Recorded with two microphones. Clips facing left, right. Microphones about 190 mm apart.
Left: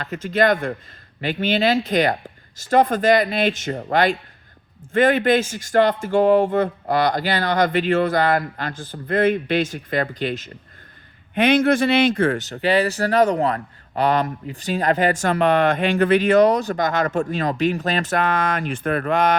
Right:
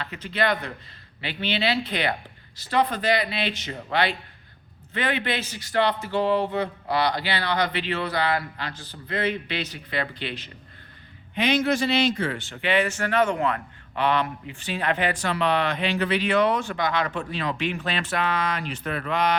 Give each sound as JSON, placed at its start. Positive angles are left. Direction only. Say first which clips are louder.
{"t": 0.0, "sound": "speech", "louder": "left 7 dB", "side_deg": 45}
{"t": 11.3, "sound": "speech", "louder": "left 6 dB", "side_deg": 55}